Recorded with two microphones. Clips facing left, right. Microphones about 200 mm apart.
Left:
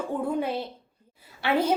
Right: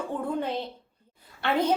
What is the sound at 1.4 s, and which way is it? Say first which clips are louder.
Speech: left 1 dB; 10° left (ahead or behind).